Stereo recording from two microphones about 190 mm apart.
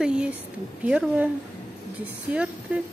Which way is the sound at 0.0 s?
5° right (ahead or behind).